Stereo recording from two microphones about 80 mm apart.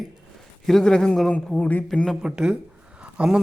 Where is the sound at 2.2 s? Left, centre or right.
Centre.